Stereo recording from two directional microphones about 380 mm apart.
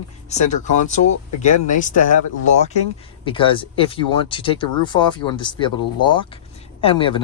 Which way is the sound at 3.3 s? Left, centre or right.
Centre.